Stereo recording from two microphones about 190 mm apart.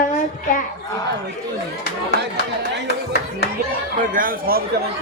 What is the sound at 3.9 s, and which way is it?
Speech, 45° right (ahead or behind).